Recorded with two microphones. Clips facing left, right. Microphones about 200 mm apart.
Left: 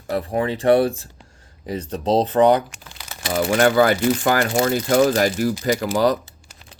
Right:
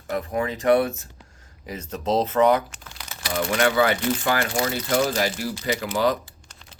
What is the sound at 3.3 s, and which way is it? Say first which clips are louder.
Speech: left 5 dB; 45° left (ahead or behind).